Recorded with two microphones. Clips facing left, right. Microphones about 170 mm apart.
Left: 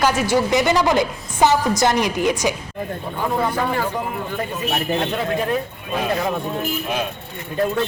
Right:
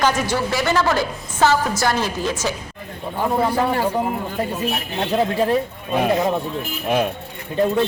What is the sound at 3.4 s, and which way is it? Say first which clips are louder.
Speech: right 2 dB; 35° right (ahead or behind).